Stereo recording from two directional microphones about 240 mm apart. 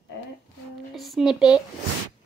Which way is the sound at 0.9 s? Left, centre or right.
Centre.